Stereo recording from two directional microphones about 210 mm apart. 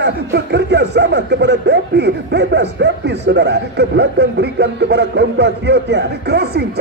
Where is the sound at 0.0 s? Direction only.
55° right (ahead or behind).